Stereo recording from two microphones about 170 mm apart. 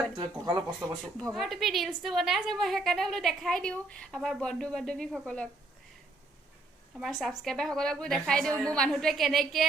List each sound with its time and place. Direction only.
0.2 s speech: 25° right (ahead or behind)
1.3 s a woman's voice: centre (ahead or behind)
7.0 s a woman's voice: centre (ahead or behind)